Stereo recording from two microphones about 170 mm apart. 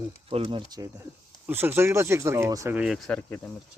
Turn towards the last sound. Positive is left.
turn(degrees=5)  # may be behind; listen again after turning